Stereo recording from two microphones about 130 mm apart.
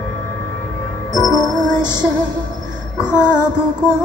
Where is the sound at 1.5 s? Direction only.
5° right (ahead or behind).